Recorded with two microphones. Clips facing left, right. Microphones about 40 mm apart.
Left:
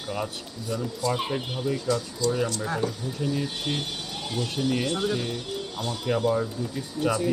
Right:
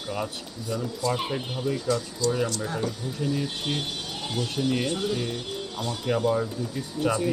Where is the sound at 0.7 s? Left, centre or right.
Centre.